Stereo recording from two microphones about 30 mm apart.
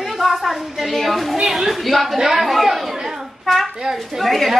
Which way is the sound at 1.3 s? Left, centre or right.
Centre.